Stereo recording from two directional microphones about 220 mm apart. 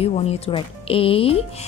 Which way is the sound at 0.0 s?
30° left (ahead or behind).